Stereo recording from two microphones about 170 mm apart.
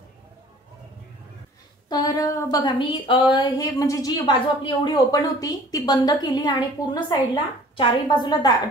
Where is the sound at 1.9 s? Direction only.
25° left (ahead or behind).